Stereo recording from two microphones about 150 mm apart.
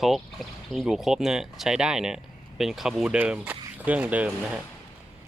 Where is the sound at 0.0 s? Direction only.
Centre (ahead or behind).